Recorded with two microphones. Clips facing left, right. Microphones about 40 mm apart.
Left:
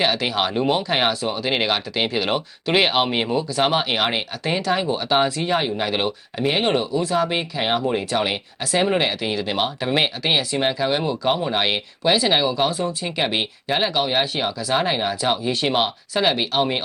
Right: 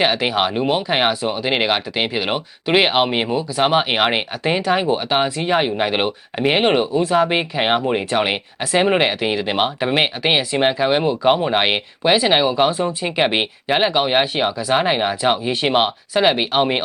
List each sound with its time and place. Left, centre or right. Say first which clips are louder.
0.0 s speech: right 3 dB; centre
3.8 s speech: right 4 dB; right